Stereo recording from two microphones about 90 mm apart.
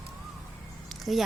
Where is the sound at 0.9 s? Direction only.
Centre (ahead or behind).